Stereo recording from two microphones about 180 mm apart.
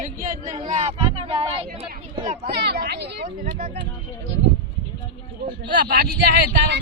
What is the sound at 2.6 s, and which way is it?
Speech, 65° right (ahead or behind).